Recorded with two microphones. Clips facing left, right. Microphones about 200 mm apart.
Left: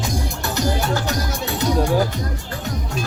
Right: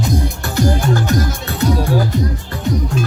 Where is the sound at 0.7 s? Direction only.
50° right (ahead or behind).